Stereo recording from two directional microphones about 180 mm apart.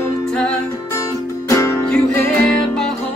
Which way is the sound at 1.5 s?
15° left (ahead or behind).